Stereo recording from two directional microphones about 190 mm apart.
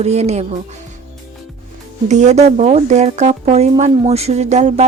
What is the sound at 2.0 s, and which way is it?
Speech, 35° right (ahead or behind).